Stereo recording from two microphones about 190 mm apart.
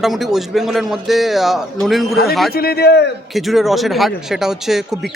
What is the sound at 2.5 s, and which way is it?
Speech, 55° left (ahead or behind).